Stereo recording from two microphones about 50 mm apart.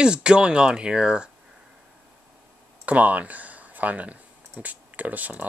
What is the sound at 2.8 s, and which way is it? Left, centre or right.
Speech, right.